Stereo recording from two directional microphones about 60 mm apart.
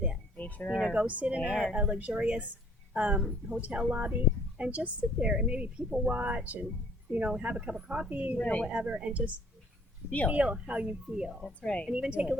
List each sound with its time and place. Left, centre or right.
0.3 s a sound: left
0.9 s speech: right
1.4 s speech: centre
1.7 s speech: right
8.4 s speech: centre
8.6 s speech: centre
11.6 s speech: centre
11.9 s speech: centre